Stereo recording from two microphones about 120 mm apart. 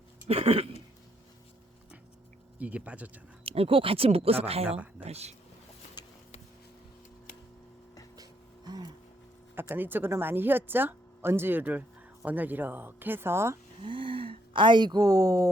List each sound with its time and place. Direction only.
0.3 s a sound: 55° right (ahead or behind)
2.6 s speech: 10° right (ahead or behind)
3.4 s speech: 55° right (ahead or behind)
8.1 s a sound: 35° right (ahead or behind)
9.6 s speech: 15° right (ahead or behind)
13.8 s speech: 45° right (ahead or behind)